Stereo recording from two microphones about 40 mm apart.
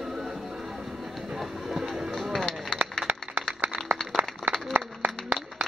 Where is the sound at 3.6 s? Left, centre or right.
Right.